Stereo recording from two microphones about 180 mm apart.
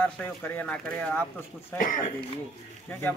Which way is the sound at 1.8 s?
50° left (ahead or behind).